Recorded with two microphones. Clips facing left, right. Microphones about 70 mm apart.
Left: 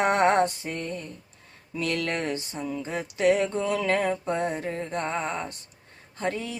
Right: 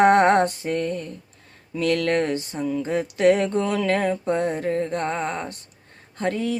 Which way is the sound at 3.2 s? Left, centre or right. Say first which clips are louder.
Right 4 dB; right.